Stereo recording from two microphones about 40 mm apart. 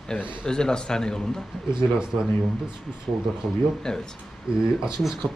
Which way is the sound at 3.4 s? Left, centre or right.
Centre.